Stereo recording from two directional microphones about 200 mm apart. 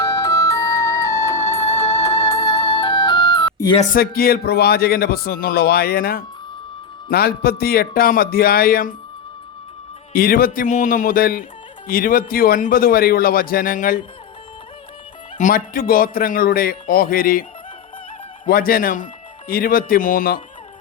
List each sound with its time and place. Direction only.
0.0 s music: 15° left (ahead or behind)
3.9 s a man's voice: 50° left (ahead or behind)
10.1 s a man's voice: 45° left (ahead or behind)
15.4 s a man's voice: 40° left (ahead or behind)
18.4 s a man's voice: 45° left (ahead or behind)